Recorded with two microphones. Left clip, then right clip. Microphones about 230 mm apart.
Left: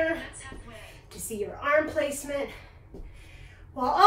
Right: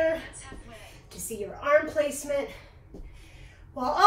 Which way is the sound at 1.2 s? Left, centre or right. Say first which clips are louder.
Even; centre.